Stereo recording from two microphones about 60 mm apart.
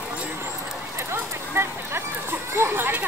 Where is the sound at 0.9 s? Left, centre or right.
Right.